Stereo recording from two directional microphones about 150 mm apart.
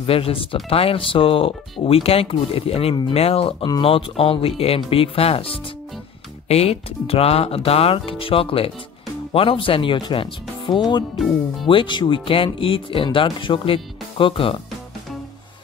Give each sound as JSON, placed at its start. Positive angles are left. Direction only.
{"t": 0.0, "sound": "speech", "side_deg": 40}